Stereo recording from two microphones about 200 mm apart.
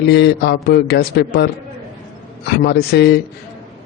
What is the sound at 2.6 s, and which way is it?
Speech, 55° left (ahead or behind).